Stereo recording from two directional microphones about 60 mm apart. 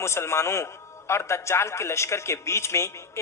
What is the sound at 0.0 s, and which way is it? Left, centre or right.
A man's voice, left.